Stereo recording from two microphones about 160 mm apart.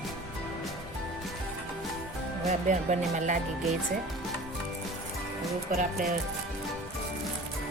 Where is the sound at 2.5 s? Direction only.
50° right (ahead or behind).